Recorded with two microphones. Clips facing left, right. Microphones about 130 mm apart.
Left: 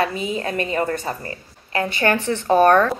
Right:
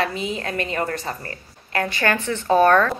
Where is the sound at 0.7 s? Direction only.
25° left (ahead or behind).